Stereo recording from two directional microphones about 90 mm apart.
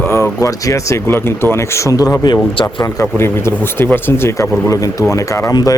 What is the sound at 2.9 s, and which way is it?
Speech, 30° left (ahead or behind).